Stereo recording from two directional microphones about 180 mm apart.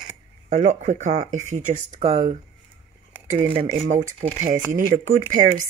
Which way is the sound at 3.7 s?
45° right (ahead or behind).